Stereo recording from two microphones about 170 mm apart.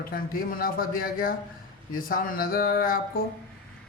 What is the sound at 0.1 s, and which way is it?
A man's voice, 60° left (ahead or behind).